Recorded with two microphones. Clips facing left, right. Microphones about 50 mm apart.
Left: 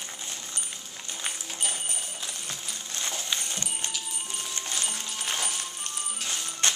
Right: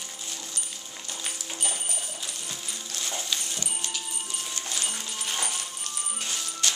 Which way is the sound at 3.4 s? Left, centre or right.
Left.